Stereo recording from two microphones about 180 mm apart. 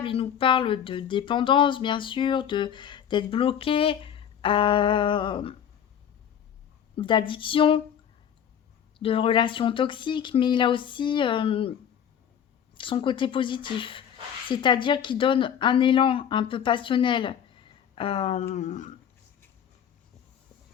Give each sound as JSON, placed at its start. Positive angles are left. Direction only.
{"t": 0.0, "sound": "speech", "side_deg": 30}
{"t": 6.9, "sound": "speech", "side_deg": 25}
{"t": 9.0, "sound": "speech", "side_deg": 30}
{"t": 12.7, "sound": "speech", "side_deg": 30}